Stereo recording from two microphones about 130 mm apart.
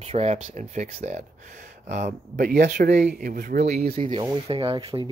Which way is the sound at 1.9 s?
80° right.